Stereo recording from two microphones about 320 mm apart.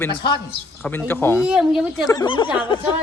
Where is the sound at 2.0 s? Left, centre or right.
Centre.